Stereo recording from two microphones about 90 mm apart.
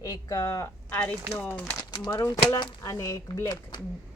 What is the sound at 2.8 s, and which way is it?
Speech, 40° left (ahead or behind).